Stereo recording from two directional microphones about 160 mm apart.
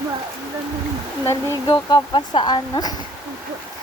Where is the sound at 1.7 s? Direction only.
30° left (ahead or behind).